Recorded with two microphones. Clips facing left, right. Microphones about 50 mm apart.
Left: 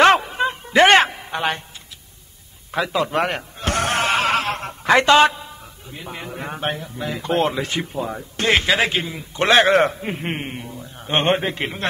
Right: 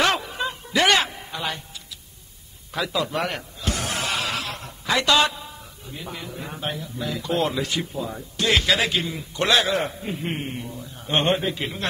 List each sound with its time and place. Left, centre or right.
0.0 s a sound: left
2.7 s a sound: left
6.3 s a man's voice: left
7.0 s speech: left
9.7 s a man's voice: left
10.2 s a man's voice: left
11.3 s a man's voice: left